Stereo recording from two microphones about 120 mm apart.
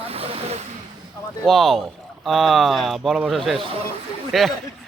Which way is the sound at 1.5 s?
5° left (ahead or behind).